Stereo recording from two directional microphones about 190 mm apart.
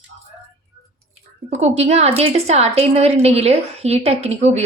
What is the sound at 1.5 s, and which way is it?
A woman's voice, 35° right (ahead or behind).